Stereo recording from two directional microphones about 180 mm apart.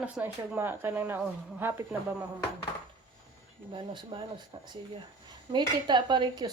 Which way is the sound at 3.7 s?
25° right (ahead or behind).